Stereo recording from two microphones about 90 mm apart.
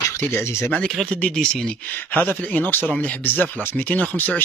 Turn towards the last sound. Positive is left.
turn(degrees=20)  # may be behind; listen again after turning